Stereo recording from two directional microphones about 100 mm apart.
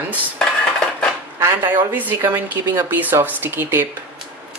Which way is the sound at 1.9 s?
20° right (ahead or behind).